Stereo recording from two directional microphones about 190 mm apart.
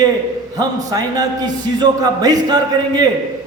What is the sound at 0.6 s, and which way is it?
A man's voice, 20° right (ahead or behind).